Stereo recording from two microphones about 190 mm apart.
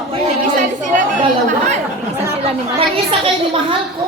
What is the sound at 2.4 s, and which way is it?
Speech, 30° right (ahead or behind).